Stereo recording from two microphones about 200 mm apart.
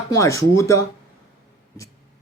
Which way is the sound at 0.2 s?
15° left (ahead or behind).